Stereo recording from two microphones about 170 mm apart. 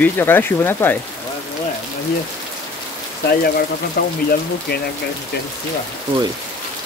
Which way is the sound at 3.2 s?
65° left (ahead or behind).